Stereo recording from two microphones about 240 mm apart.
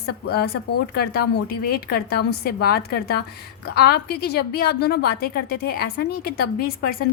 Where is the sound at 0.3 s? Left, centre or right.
Left.